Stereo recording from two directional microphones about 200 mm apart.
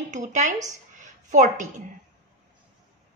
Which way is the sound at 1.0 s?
40° right (ahead or behind).